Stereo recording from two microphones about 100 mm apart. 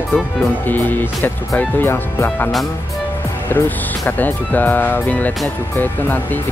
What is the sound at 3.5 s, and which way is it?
Speech, 20° left (ahead or behind).